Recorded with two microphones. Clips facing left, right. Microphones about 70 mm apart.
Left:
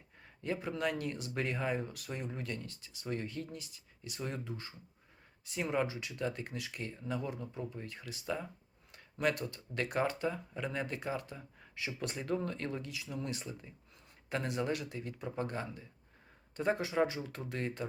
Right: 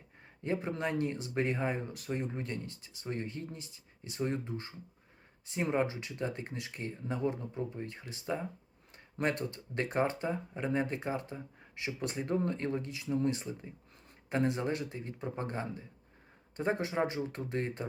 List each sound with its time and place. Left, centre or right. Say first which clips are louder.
0.4 s speech: right 1 dB; right